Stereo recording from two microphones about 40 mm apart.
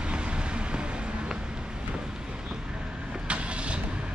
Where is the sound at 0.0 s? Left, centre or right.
Right.